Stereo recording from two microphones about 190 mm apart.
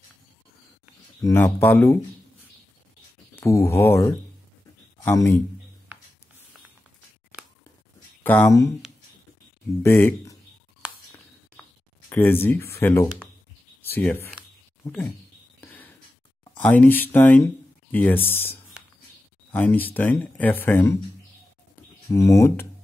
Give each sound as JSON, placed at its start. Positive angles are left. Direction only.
{"t": 1.2, "sound": "speech", "side_deg": 10}
{"t": 3.3, "sound": "speech", "side_deg": 15}
{"t": 8.2, "sound": "speech", "side_deg": 10}
{"t": 9.8, "sound": "speech", "side_deg": 10}
{"t": 12.1, "sound": "speech", "side_deg": 10}
{"t": 15.6, "sound": "a sound", "side_deg": 10}
{"t": 16.5, "sound": "speech", "side_deg": 10}
{"t": 18.8, "sound": "a sound", "side_deg": -5}
{"t": 19.5, "sound": "speech", "side_deg": 10}
{"t": 22.1, "sound": "speech", "side_deg": 15}